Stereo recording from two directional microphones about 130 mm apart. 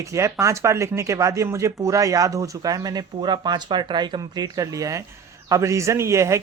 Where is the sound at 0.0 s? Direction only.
25° right (ahead or behind).